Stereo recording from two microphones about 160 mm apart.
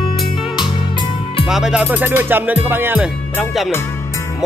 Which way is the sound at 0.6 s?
30° left (ahead or behind).